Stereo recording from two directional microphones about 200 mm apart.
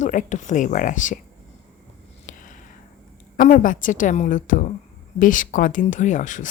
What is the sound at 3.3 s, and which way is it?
Speech, 40° left (ahead or behind).